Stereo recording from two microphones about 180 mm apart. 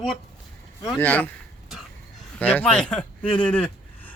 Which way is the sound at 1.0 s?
10° left (ahead or behind).